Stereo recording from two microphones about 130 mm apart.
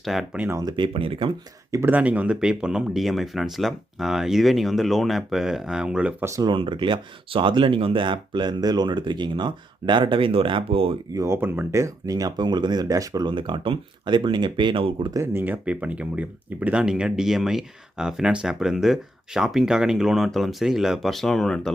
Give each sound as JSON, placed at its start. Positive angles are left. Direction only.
{"t": 0.0, "sound": "speech", "side_deg": 0}
{"t": 0.6, "sound": "speech", "side_deg": -40}
{"t": 1.7, "sound": "speech", "side_deg": -15}
{"t": 6.2, "sound": "speech", "side_deg": -25}
{"t": 6.5, "sound": "speech", "side_deg": -40}
{"t": 11.1, "sound": "speech", "side_deg": -20}
{"t": 15.1, "sound": "speech", "side_deg": -20}